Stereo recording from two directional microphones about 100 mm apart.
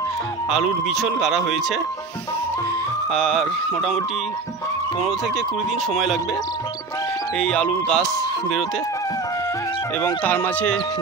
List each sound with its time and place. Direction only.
0.5 s speech: 5° right (ahead or behind)
3.1 s speech: 5° left (ahead or behind)
7.3 s speech: 10° left (ahead or behind)
10.0 s speech: 20° left (ahead or behind)